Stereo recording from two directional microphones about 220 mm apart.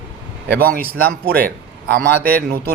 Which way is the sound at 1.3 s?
45° right (ahead or behind).